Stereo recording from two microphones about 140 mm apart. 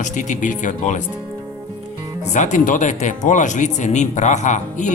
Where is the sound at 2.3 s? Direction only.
60° left (ahead or behind).